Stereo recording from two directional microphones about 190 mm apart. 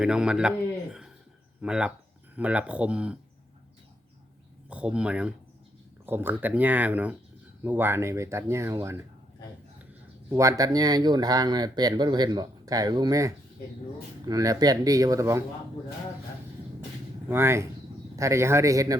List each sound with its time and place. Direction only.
0.0 s a man's voice: 5° right (ahead or behind)
1.6 s a man's voice: 5° right (ahead or behind)
4.7 s speech: 5° right (ahead or behind)
10.2 s speech: 15° right (ahead or behind)
17.2 s speech: 15° right (ahead or behind)